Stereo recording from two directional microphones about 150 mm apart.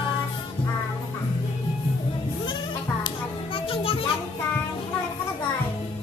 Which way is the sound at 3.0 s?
35° left (ahead or behind).